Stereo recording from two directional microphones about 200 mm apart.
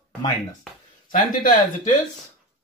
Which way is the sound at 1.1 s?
40° left (ahead or behind).